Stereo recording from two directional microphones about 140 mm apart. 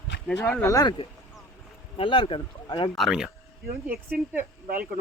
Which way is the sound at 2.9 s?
Centre (ahead or behind).